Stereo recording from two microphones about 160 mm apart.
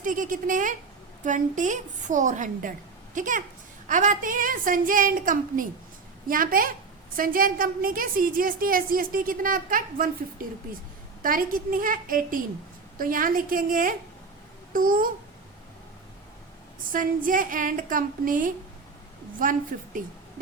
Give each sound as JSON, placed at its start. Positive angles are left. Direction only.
{"t": 0.0, "sound": "a woman's voice", "side_deg": -55}
{"t": 16.9, "sound": "a woman's voice", "side_deg": -60}